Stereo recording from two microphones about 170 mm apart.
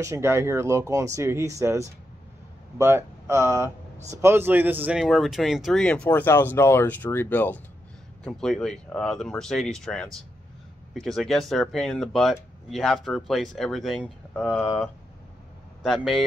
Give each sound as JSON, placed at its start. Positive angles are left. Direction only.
{"t": 0.0, "sound": "speech", "side_deg": -15}
{"t": 15.8, "sound": "speech", "side_deg": 0}